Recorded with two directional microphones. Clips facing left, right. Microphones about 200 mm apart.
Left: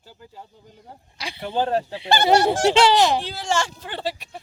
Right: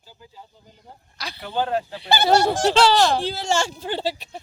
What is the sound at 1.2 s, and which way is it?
Speech, 25° left (ahead or behind).